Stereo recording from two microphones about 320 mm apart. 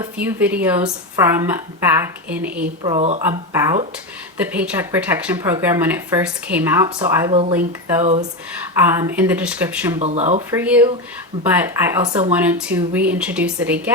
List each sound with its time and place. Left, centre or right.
0.0 s speech: centre
2.8 s speech: centre
8.8 s speech: centre
10.0 s speech: right
10.5 s speech: centre